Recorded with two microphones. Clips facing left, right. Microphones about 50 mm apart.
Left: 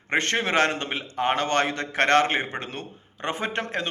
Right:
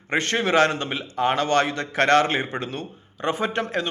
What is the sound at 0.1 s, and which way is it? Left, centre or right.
A man's voice, left.